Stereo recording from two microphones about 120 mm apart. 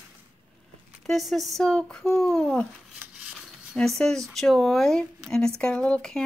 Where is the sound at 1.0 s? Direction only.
Centre (ahead or behind).